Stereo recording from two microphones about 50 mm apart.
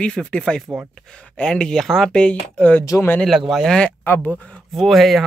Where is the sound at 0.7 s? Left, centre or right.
Right.